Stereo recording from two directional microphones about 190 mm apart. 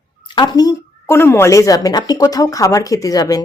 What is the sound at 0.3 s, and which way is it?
A woman's voice, 20° left (ahead or behind).